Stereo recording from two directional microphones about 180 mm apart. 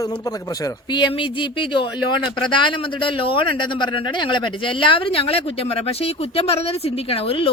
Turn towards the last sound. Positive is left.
turn(degrees=30)  # may be behind; listen again after turning